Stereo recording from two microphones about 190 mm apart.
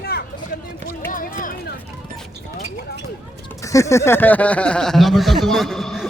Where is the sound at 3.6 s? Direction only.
15° left (ahead or behind); by 6.1 s centre (ahead or behind).